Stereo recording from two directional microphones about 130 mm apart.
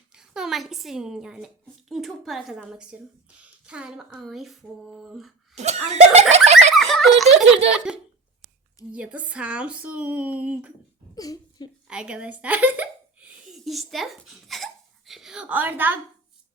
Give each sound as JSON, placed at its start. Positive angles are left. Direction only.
{"t": 0.1, "sound": "a woman's voice", "side_deg": -5}
{"t": 5.5, "sound": "speech", "side_deg": -55}
{"t": 6.7, "sound": "giggle", "side_deg": 0}
{"t": 8.9, "sound": "speech", "side_deg": -10}
{"t": 11.1, "sound": "speech", "side_deg": 30}
{"t": 11.9, "sound": "speech", "side_deg": -10}